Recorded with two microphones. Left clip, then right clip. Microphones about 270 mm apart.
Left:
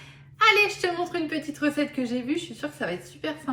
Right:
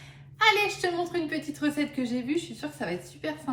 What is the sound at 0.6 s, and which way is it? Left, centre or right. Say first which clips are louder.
A woman's voice: left 2 dB; centre.